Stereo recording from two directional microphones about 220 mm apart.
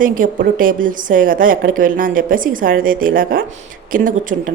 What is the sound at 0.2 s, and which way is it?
A woman's voice, 35° right (ahead or behind).